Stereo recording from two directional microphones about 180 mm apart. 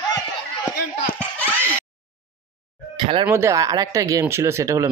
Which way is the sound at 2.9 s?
30° right (ahead or behind).